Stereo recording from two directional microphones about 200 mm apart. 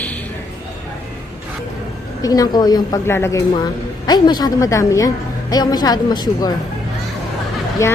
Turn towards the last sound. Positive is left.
turn(degrees=15)  # may be behind; listen again after turning